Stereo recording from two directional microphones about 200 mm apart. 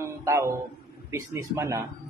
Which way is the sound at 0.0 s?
15° right (ahead or behind).